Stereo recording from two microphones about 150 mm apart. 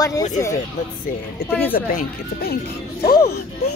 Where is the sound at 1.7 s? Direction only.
80° left.